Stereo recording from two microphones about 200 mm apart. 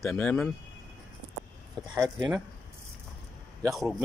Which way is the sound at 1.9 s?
15° right (ahead or behind).